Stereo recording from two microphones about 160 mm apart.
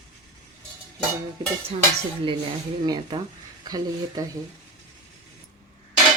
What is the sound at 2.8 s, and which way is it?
Speech, 25° right (ahead or behind).